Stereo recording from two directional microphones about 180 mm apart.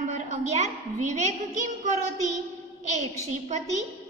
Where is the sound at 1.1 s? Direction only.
40° right (ahead or behind).